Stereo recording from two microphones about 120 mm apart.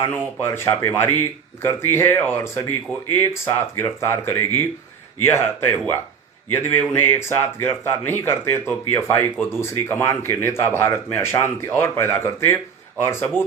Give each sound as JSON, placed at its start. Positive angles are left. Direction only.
{"t": 0.0, "sound": "speech", "side_deg": 20}